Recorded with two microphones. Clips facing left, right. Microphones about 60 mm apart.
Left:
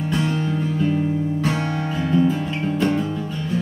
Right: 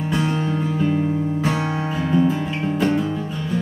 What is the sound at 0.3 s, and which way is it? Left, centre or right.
Music, right.